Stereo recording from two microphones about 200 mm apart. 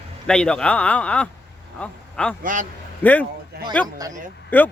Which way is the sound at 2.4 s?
40° right (ahead or behind).